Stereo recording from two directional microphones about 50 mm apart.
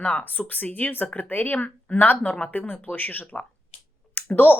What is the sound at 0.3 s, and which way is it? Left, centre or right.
A woman's voice, left.